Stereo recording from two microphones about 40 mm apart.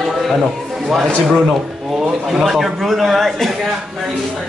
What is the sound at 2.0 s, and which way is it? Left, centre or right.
A man's voice, centre.